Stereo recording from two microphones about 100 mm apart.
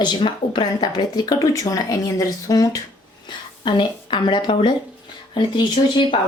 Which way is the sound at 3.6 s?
50° left (ahead or behind).